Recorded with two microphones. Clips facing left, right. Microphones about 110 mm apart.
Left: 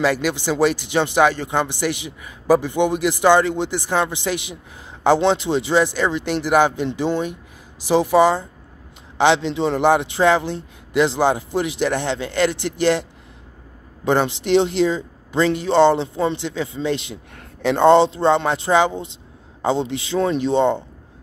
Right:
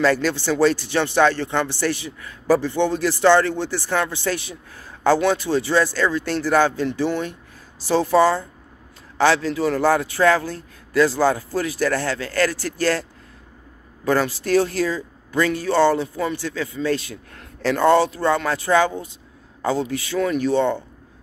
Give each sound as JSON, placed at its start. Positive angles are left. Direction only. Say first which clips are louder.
{"t": 0.0, "sound": "a man's voice", "louder": "right 1 dB", "side_deg": 15}
{"t": 14.0, "sound": "a man's voice", "louder": "left 2 dB", "side_deg": 20}